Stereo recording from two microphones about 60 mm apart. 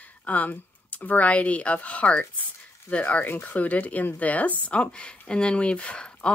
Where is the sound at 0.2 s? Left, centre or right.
Left.